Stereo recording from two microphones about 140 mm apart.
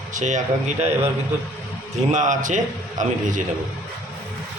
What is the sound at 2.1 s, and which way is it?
A man's voice, 60° right (ahead or behind).